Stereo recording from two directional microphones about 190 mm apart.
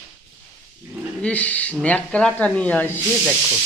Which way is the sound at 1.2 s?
5° left (ahead or behind).